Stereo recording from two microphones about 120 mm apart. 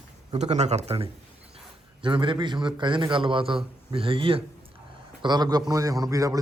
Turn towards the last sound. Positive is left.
turn(degrees=-30)  # may be behind; listen again after turning